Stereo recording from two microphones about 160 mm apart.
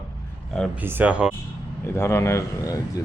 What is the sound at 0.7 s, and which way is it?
Speech, 10° right (ahead or behind).